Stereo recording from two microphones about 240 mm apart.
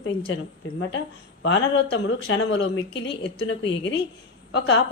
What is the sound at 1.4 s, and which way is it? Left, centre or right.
A woman's voice, left.